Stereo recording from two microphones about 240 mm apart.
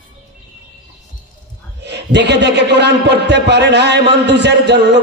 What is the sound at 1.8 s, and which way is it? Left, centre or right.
A man's voice, right.